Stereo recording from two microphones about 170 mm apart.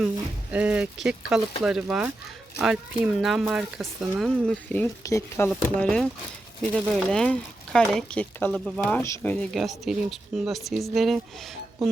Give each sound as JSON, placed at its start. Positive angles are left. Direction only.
{"t": 0.5, "sound": "speech", "side_deg": -5}
{"t": 5.0, "sound": "speech", "side_deg": 20}
{"t": 5.5, "sound": "speech", "side_deg": 5}